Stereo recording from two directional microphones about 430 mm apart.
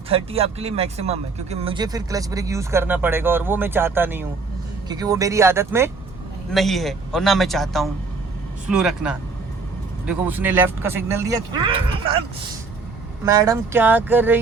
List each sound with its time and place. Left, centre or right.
0.1 s speech: centre
13.2 s speech: centre